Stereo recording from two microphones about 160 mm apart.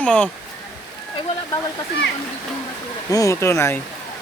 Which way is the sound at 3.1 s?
20° left (ahead or behind).